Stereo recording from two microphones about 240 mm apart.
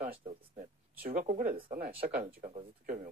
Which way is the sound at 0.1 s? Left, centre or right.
Right.